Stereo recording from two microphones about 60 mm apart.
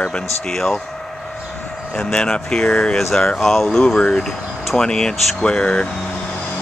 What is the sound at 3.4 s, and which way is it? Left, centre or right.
Speech, centre.